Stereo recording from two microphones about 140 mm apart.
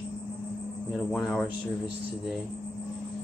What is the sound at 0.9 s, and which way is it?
Speech, centre (ahead or behind).